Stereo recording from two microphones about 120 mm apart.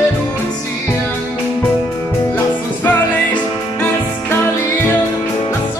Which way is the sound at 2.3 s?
15° left (ahead or behind).